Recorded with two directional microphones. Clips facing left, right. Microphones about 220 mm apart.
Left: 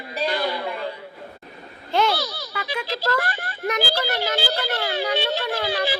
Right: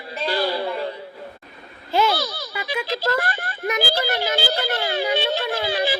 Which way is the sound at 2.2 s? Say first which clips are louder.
Right 2 dB; 50° right (ahead or behind).